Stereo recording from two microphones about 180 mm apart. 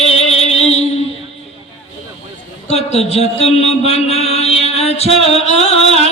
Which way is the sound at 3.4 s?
35° left (ahead or behind).